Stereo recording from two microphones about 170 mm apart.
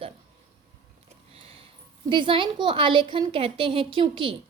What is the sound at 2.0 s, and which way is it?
A woman's voice, 30° right (ahead or behind).